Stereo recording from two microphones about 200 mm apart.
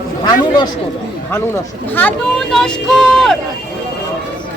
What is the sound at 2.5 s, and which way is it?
Child singing, centre (ahead or behind).